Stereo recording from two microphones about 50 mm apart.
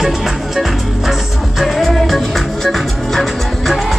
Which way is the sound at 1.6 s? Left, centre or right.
Centre.